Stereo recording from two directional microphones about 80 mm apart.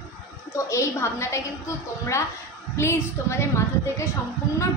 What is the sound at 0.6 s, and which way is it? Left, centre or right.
Speech, left.